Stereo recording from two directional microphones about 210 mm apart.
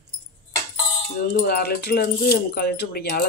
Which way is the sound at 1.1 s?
45° left (ahead or behind).